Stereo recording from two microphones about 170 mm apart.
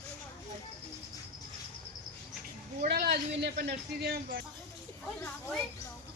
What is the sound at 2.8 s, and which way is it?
Speech, 70° right (ahead or behind).